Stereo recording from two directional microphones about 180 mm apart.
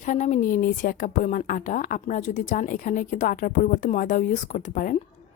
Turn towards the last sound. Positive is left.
turn(degrees=45)  # may be behind; listen again after turning